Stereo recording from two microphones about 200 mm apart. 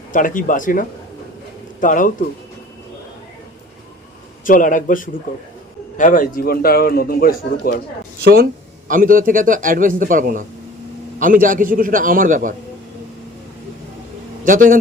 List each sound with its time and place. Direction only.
0.1 s a man's voice: 40° left (ahead or behind)
4.4 s a man's voice: 40° left (ahead or behind)
8.2 s a man's voice: 50° right (ahead or behind)
14.4 s a man's voice: 40° right (ahead or behind)